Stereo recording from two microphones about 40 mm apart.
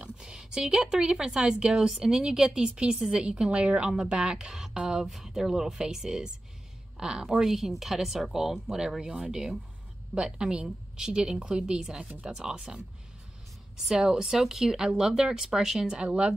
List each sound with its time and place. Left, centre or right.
0.0 s a woman's voice: centre
5.1 s a woman's voice: centre
10.1 s a woman's voice: right
13.8 s a woman's voice: centre